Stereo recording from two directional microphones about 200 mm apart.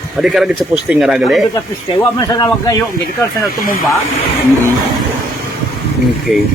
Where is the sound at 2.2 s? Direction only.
20° left (ahead or behind).